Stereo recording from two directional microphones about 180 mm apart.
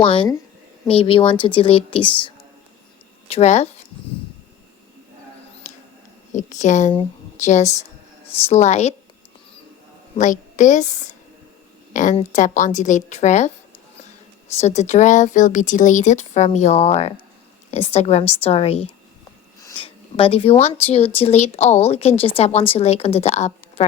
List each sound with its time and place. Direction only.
0.0 s a woman's voice: 25° left (ahead or behind)
6.3 s a woman's voice: 40° left (ahead or behind)
10.2 s a woman's voice: 45° left (ahead or behind)
14.5 s speech: 35° left (ahead or behind)